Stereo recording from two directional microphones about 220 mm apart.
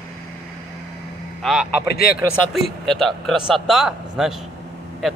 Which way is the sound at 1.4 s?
Centre (ahead or behind).